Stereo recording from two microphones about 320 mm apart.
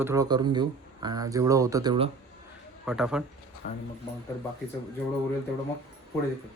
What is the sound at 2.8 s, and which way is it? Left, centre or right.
Speech, centre.